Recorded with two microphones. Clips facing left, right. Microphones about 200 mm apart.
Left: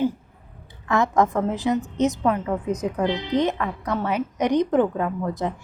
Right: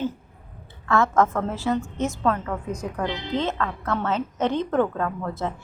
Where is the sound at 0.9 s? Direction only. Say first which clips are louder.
Even; 15° left (ahead or behind).